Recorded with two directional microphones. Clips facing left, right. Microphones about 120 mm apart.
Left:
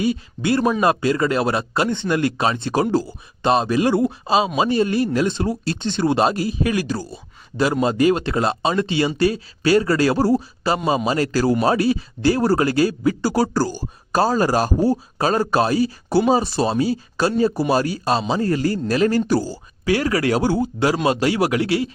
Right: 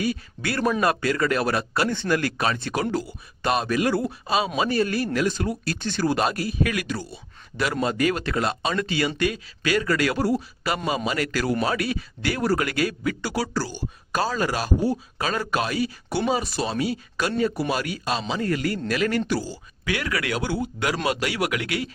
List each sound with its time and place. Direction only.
0.0 s speech: 25° left (ahead or behind)